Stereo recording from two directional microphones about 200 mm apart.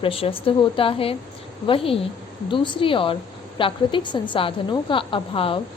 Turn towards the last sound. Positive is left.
turn(degrees=25)  # may be behind; listen again after turning